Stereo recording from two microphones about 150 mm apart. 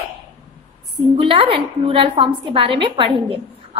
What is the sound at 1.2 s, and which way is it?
A woman's voice, 35° right (ahead or behind).